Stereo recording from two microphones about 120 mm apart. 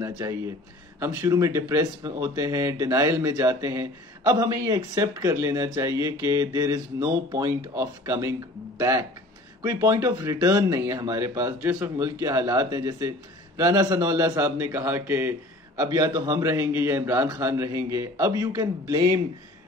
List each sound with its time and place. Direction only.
0.0 s speech: 25° right (ahead or behind)
15.9 s speech: 30° right (ahead or behind)